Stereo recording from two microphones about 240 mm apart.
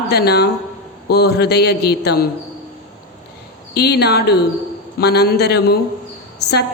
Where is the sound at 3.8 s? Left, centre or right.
Left.